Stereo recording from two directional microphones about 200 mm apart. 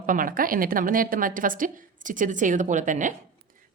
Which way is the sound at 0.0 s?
45° right (ahead or behind).